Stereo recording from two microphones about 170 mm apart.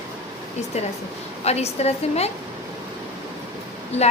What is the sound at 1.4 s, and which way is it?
Speech, 40° left (ahead or behind).